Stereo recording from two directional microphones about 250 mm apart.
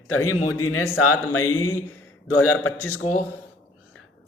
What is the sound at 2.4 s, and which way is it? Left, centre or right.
Speech, left.